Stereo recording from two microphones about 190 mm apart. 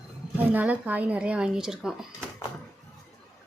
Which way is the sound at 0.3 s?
10° right (ahead or behind).